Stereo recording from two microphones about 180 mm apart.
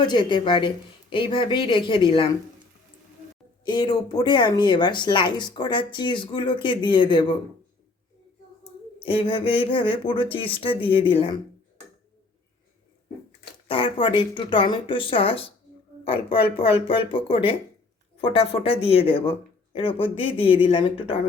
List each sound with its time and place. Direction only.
0.0 s speech: 25° left (ahead or behind)
3.6 s speech: 25° left (ahead or behind)
9.0 s speech: 30° left (ahead or behind)
13.7 s speech: 30° left (ahead or behind)